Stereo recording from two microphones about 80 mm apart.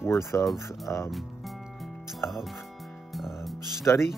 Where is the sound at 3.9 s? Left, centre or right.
Left.